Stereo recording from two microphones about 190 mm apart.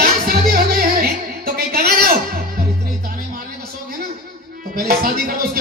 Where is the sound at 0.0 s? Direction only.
50° right (ahead or behind).